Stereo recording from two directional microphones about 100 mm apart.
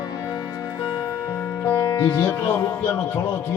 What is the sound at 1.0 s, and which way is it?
Music, 35° left (ahead or behind).